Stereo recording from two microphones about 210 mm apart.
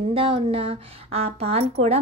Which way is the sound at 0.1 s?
25° right (ahead or behind).